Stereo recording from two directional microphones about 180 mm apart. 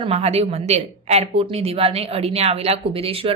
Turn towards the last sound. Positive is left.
turn(degrees=-30)  # may be behind; listen again after turning